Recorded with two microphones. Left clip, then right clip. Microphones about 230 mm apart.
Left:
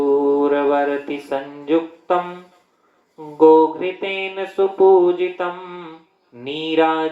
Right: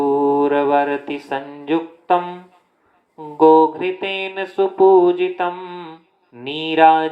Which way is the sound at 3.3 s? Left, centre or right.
Right.